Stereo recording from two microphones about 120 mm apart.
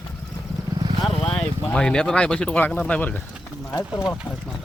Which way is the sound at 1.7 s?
5° left (ahead or behind).